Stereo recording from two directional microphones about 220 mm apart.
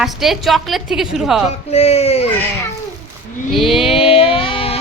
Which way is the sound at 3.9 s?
25° left (ahead or behind).